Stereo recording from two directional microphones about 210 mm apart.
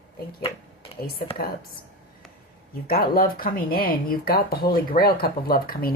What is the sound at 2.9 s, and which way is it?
Speech, 45° left (ahead or behind).